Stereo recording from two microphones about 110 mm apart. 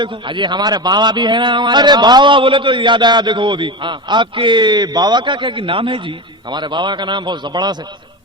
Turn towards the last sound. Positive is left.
turn(degrees=-40)  # may be behind; listen again after turning